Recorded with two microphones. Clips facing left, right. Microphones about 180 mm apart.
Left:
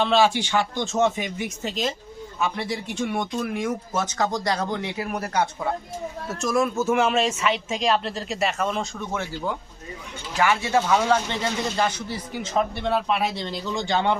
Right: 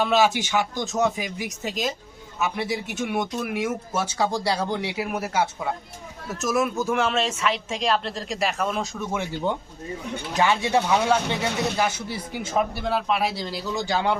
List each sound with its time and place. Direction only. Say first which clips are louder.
0.0 s speech: left 1 dB; 10° right (ahead or behind)
0.9 s speech: left 2 dB; centre (ahead or behind)
10.3 s speech: even; 20° right (ahead or behind)